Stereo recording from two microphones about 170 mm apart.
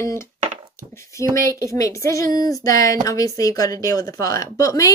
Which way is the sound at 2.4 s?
20° left (ahead or behind).